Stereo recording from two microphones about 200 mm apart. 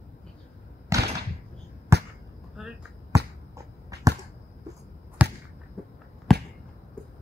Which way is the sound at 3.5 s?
15° right (ahead or behind).